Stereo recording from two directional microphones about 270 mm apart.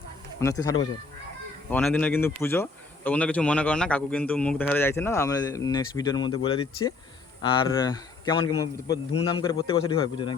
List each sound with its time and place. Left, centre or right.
0.3 s a man's voice: centre